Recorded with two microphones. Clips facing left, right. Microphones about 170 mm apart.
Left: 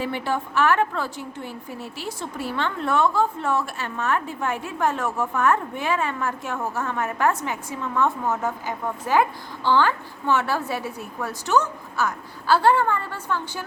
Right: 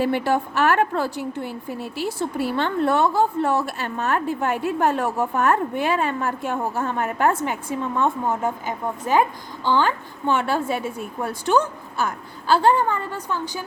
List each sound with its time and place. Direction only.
0.1 s a woman's voice: 40° right (ahead or behind)
1.5 s speech: 5° right (ahead or behind)
2.6 s a woman's voice: 35° right (ahead or behind)
9.6 s a woman's voice: 15° right (ahead or behind)